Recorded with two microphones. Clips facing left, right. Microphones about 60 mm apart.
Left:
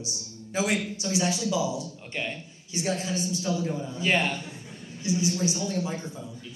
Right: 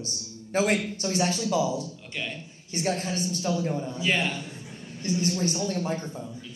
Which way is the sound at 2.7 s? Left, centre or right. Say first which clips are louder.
Right 1 dB; right.